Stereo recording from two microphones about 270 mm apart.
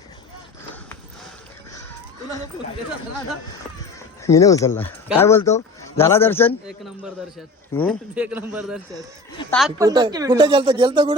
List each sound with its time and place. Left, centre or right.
4.2 s a man's voice: centre
9.7 s speech: centre